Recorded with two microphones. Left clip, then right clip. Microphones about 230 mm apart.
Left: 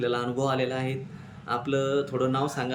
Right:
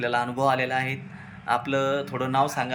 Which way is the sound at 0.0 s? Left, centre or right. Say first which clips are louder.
Right 4 dB; centre.